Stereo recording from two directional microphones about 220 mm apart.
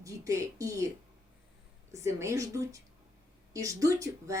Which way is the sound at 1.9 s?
15° right (ahead or behind).